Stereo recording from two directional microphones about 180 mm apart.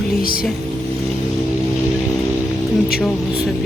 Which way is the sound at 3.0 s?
Centre (ahead or behind).